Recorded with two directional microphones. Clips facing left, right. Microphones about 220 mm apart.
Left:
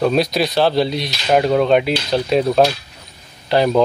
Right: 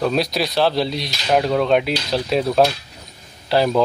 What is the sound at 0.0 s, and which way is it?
Speech, centre (ahead or behind).